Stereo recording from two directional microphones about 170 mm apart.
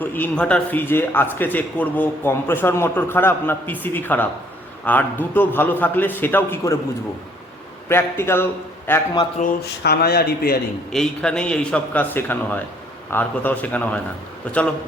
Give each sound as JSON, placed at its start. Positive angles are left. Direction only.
{"t": 0.0, "sound": "a man's voice", "side_deg": 10}
{"t": 7.9, "sound": "a man's voice", "side_deg": 15}
{"t": 9.4, "sound": "speech", "side_deg": 70}
{"t": 10.9, "sound": "a man's voice", "side_deg": 5}